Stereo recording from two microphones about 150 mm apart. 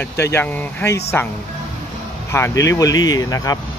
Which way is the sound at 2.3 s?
20° left (ahead or behind).